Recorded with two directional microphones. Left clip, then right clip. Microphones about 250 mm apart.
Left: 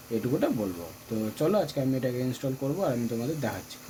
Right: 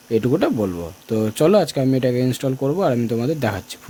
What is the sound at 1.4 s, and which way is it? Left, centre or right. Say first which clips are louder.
Speech: right 10 dB; right.